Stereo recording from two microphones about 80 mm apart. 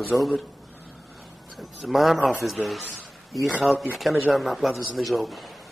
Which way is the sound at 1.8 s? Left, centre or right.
Centre.